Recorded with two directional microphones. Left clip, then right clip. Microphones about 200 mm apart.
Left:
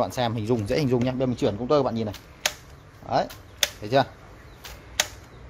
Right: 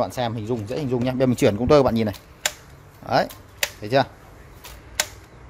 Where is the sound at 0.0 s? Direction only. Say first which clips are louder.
Right 1 dB; centre (ahead or behind); by 1.0 s 15° left (ahead or behind).